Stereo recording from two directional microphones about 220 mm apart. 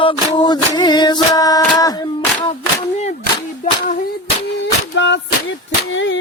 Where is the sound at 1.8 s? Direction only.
15° left (ahead or behind).